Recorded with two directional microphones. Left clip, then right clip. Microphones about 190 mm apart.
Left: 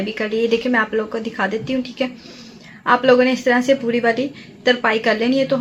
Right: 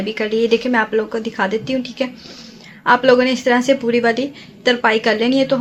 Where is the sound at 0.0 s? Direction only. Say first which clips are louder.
Right 2 dB; 40° right (ahead or behind).